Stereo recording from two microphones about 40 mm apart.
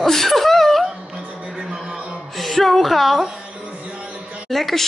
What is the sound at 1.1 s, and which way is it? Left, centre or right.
Music, centre.